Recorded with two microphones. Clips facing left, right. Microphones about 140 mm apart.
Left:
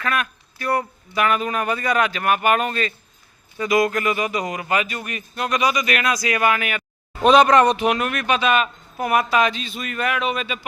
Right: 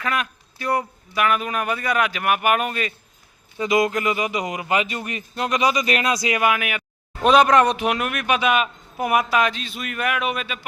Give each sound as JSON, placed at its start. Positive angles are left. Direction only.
{"t": 0.0, "sound": "speech", "side_deg": -20}
{"t": 1.2, "sound": "speech", "side_deg": -5}
{"t": 3.6, "sound": "speech", "side_deg": -20}
{"t": 9.3, "sound": "speech", "side_deg": 0}